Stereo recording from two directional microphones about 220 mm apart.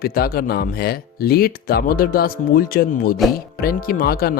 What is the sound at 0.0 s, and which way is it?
Speech, 45° left (ahead or behind).